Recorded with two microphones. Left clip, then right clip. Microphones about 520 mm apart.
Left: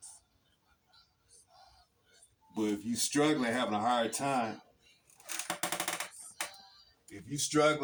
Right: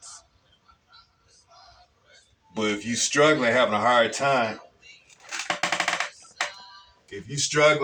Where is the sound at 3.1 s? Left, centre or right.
Left.